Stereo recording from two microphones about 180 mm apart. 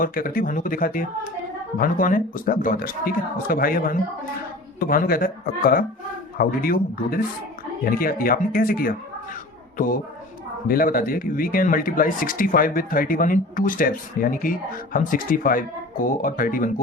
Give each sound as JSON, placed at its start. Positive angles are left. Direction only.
{"t": 0.0, "sound": "a man's voice", "side_deg": 50}